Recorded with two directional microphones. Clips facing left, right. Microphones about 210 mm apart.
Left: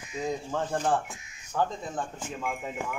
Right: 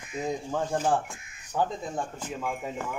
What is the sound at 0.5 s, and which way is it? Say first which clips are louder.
Speech: right 2 dB; 10° right (ahead or behind).